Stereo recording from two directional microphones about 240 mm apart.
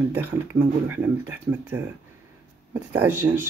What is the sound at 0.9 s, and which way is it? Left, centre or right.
Speech, centre.